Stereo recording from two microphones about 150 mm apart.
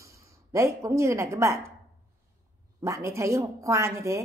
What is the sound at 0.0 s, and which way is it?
A woman's voice, 20° right (ahead or behind).